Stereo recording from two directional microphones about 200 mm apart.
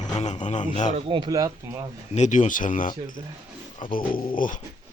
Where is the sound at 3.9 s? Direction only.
45° left (ahead or behind).